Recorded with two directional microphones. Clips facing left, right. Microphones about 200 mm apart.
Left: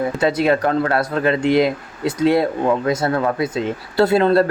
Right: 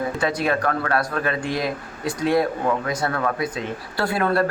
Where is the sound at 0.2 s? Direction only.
25° left (ahead or behind).